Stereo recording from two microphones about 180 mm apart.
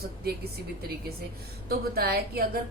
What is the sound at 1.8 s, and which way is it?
Speech, 60° right (ahead or behind).